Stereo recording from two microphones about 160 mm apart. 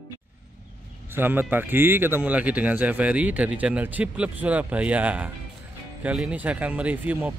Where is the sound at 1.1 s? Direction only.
10° right (ahead or behind).